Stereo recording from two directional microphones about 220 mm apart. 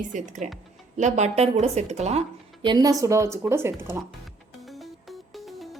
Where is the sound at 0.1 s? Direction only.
35° right (ahead or behind); by 4.0 s 10° right (ahead or behind).